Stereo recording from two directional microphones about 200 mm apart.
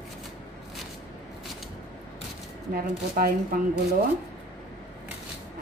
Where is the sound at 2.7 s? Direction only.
45° right (ahead or behind).